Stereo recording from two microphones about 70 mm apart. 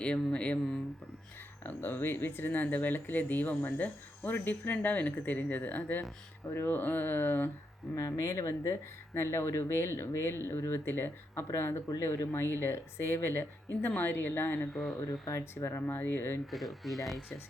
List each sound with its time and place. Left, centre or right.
0.0 s speech: centre
1.6 s speech: left
7.9 s speech: left
15.4 s speech: left
15.9 s speech: left
16.5 s speech: centre